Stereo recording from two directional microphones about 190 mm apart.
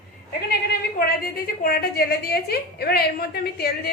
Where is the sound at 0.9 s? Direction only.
50° left (ahead or behind).